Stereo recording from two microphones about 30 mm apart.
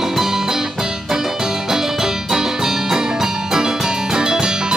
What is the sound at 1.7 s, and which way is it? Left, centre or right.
Music, centre.